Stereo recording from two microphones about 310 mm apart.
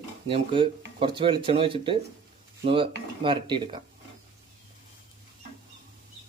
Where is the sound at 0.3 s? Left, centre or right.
Centre.